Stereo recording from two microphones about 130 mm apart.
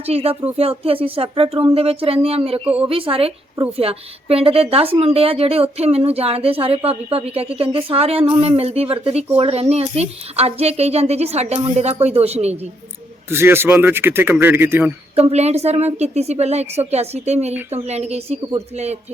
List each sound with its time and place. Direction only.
0.1 s a woman's voice: 50° right (ahead or behind)
2.6 s a man's voice: 10° right (ahead or behind)
2.9 s a woman's voice: 45° right (ahead or behind)
13.3 s a man's voice: 20° right (ahead or behind)
15.1 s a woman's voice: 55° right (ahead or behind)